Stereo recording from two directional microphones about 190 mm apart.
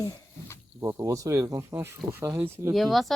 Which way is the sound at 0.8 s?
15° right (ahead or behind).